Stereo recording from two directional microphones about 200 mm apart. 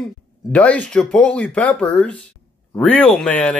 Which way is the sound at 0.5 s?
5° left (ahead or behind).